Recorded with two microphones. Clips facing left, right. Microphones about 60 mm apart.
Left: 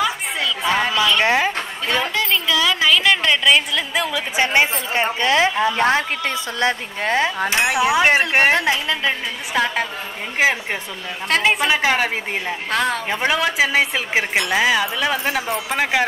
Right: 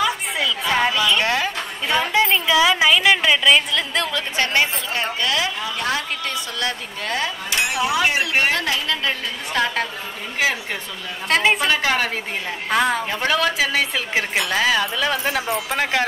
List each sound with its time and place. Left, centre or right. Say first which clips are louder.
0.0 s a sound: even; centre
1.2 s a sound: left 4 dB; left
2.1 s a woman's voice: right 3 dB; centre; by 9.1 s left
9.5 s a woman's voice: left 1 dB; centre
10.4 s a woman's voice: left 3 dB; left
11.2 s a woman's voice: even; centre
11.7 s a woman's voice: left 2 dB; centre
12.6 s a woman's voice: right 3 dB; centre
13.1 s a woman's voice: left 1 dB; centre